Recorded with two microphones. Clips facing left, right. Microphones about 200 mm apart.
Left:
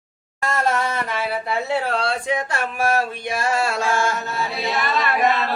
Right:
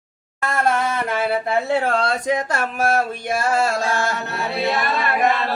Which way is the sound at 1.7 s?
50° right (ahead or behind).